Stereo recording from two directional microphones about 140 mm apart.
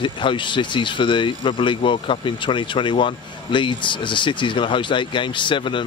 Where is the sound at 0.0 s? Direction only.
35° left (ahead or behind).